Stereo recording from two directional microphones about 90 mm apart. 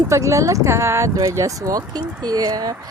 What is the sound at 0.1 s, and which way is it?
Speech, 35° right (ahead or behind).